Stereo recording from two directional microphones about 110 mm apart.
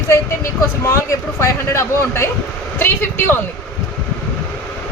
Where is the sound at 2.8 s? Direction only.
20° left (ahead or behind).